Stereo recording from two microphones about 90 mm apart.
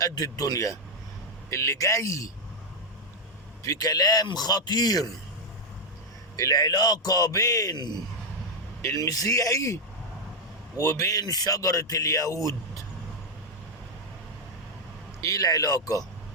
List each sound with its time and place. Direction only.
0.0 s a man's voice: 40° left (ahead or behind)
3.6 s a man's voice: 40° left (ahead or behind)
6.3 s a man's voice: 40° left (ahead or behind)
8.8 s a man's voice: 35° left (ahead or behind)
15.2 s a man's voice: 40° left (ahead or behind)